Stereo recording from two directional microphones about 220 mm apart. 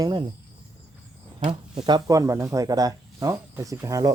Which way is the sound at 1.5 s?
20° right (ahead or behind).